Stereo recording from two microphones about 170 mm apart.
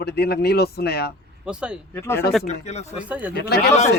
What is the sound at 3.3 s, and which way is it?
Speech, 70° left (ahead or behind).